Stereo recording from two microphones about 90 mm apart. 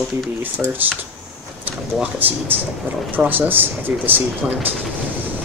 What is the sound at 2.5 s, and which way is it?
Speech, 20° right (ahead or behind).